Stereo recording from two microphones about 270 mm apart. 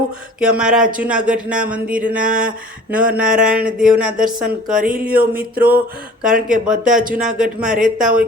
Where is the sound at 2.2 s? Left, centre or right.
Right.